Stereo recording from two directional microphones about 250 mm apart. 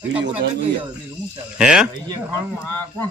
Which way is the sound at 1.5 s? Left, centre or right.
Centre.